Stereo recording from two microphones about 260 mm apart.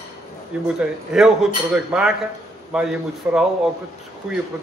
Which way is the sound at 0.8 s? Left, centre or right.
Centre.